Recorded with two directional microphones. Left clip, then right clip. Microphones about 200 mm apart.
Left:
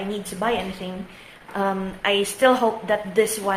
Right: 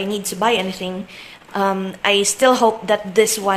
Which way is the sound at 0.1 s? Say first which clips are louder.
Right 6 dB; 40° right (ahead or behind).